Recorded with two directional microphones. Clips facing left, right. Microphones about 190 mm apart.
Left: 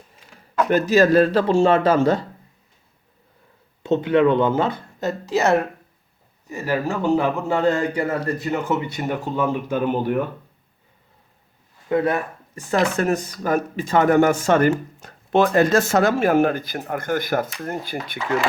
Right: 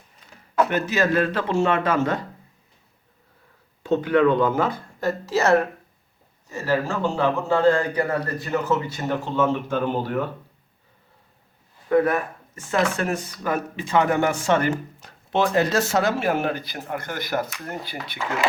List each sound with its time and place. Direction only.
0.7 s speech: 40° left (ahead or behind)
3.8 s speech: 25° left (ahead or behind)
11.9 s a sound: 25° left (ahead or behind)
12.6 s speech: 40° left (ahead or behind)